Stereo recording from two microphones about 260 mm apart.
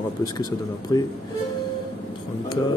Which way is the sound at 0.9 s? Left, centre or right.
Centre.